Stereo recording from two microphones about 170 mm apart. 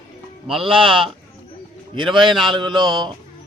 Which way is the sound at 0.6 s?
30° right (ahead or behind).